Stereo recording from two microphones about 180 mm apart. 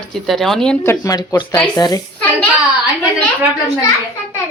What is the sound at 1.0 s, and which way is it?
Speech, 20° left (ahead or behind).